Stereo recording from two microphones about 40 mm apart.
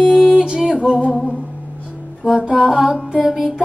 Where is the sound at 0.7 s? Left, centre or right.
Centre.